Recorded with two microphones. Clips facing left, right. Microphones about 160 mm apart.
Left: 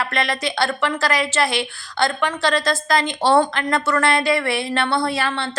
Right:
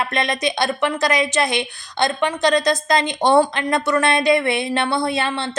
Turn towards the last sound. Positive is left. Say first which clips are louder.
# right 1 dB
turn(degrees=-20)  # may be behind; listen again after turning